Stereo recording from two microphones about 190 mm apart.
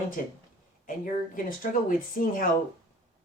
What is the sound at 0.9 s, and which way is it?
Speech, 45° left (ahead or behind).